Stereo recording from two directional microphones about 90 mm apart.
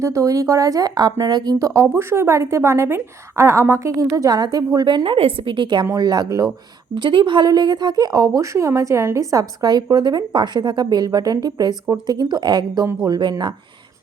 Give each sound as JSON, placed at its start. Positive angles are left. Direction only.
{"t": 0.0, "sound": "speech", "side_deg": -35}
{"t": 5.8, "sound": "speech", "side_deg": -45}
{"t": 6.9, "sound": "speech", "side_deg": -65}